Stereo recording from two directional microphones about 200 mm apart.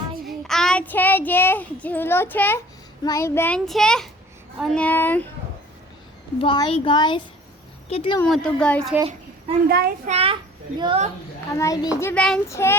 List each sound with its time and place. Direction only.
0.3 s child singing: centre (ahead or behind)
3.0 s a child's voice: 15° left (ahead or behind)
6.4 s speech: 25° left (ahead or behind)
8.2 s a woman's voice: 5° left (ahead or behind)
9.6 s a child's voice: 50° right (ahead or behind)
10.1 s a child's voice: 30° right (ahead or behind)
11.5 s a child's voice: 15° left (ahead or behind)